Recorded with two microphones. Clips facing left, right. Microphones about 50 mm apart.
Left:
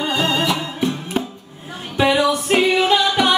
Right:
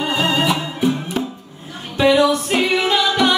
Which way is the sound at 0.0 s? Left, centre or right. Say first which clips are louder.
Right 1 dB; centre.